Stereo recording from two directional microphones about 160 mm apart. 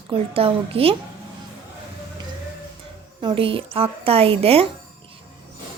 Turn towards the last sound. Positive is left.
turn(degrees=-35)  # may be behind; listen again after turning